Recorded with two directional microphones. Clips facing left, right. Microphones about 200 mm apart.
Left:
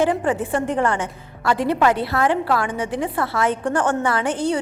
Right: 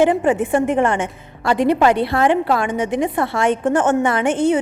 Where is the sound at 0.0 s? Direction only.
25° right (ahead or behind).